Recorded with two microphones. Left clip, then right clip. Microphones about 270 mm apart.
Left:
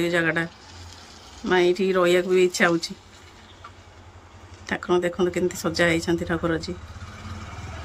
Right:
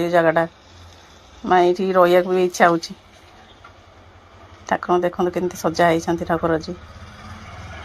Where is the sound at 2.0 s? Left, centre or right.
Centre.